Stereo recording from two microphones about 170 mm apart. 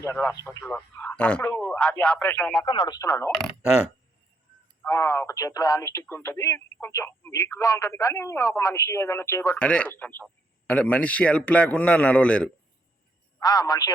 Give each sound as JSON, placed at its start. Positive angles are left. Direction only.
{"t": 0.6, "sound": "speech", "side_deg": 5}
{"t": 2.6, "sound": "speech", "side_deg": 25}
{"t": 4.9, "sound": "speech", "side_deg": 15}
{"t": 9.6, "sound": "speech", "side_deg": 5}
{"t": 13.4, "sound": "speech", "side_deg": 25}